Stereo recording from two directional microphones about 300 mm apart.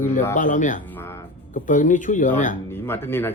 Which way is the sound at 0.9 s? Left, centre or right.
Centre.